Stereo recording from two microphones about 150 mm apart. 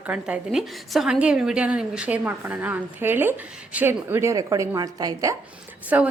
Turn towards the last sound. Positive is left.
turn(degrees=-10)  # may be behind; listen again after turning